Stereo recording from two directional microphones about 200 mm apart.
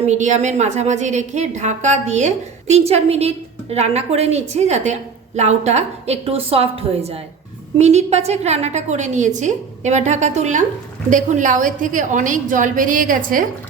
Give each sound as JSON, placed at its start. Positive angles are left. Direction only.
{"t": 0.0, "sound": "a woman's voice", "side_deg": -35}